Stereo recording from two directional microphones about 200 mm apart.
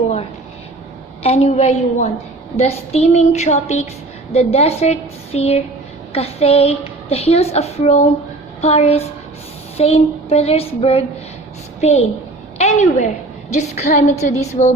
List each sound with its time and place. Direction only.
1.2 s a woman's voice: 30° left (ahead or behind)